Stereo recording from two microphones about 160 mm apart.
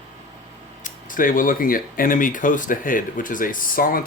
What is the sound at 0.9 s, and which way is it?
Speech, 60° left (ahead or behind).